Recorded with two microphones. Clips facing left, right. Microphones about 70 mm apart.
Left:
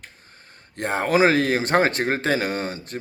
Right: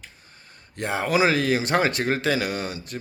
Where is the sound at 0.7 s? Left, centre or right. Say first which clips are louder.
Left 2 dB; left.